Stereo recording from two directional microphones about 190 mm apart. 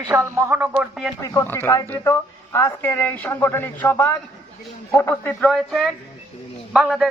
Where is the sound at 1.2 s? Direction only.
15° left (ahead or behind).